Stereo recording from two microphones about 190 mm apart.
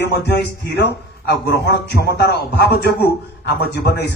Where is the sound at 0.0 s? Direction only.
65° left (ahead or behind).